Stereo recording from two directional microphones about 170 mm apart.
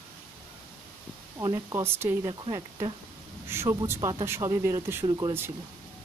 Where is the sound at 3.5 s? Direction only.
15° right (ahead or behind).